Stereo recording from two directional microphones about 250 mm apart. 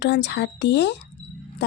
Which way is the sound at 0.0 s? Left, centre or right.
Left.